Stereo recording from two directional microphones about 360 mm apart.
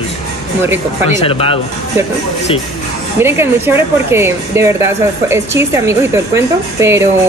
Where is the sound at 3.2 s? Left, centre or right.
Centre.